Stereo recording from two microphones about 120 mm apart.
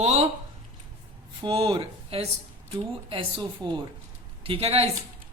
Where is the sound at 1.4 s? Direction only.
45° right (ahead or behind).